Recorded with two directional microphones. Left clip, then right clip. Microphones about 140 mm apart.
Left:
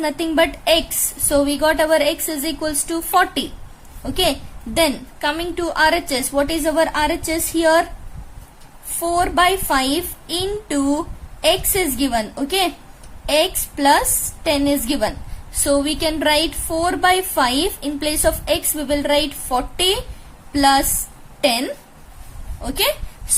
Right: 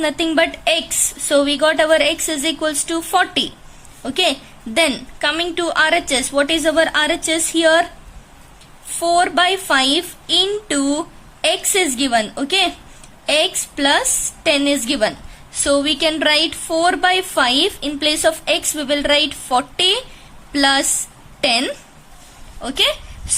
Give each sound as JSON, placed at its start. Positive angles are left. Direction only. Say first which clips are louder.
{"t": 0.0, "sound": "a woman's voice", "louder": "right 1 dB", "side_deg": -10}
{"t": 8.9, "sound": "a woman's voice", "louder": "right 4 dB", "side_deg": -10}